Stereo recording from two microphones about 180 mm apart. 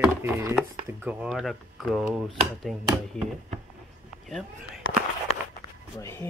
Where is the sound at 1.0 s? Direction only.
5° right (ahead or behind).